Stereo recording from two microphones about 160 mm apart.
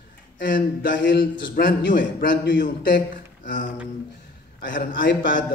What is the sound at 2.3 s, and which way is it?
Speech, 80° left.